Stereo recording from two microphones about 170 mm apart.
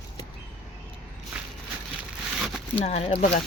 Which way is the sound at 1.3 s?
5° right (ahead or behind).